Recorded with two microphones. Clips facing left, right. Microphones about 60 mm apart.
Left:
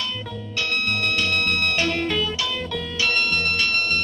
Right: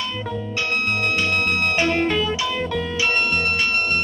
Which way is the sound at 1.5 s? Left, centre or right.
Centre.